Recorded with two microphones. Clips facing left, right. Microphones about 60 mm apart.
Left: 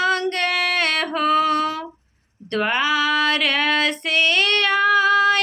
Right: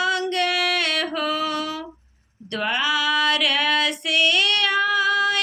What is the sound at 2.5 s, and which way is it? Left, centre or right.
Female singing, left.